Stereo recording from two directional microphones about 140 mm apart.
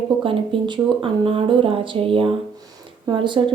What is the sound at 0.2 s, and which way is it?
Speech, 40° right (ahead or behind).